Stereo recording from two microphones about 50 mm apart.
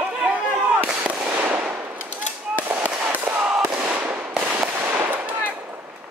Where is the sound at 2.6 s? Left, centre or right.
Right.